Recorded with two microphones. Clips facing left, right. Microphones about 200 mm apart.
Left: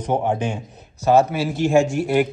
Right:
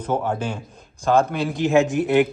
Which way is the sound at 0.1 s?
20° left (ahead or behind).